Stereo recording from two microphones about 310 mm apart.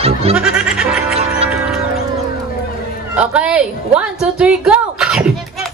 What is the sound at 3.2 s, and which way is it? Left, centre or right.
A woman's voice, centre.